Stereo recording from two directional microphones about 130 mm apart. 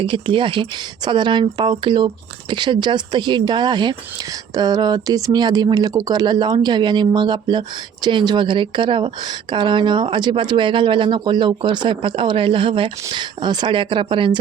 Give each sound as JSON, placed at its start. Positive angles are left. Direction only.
{"t": 0.0, "sound": "speech", "side_deg": -40}